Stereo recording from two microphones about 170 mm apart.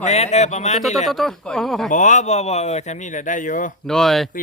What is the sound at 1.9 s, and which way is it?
Speech, 45° left (ahead or behind).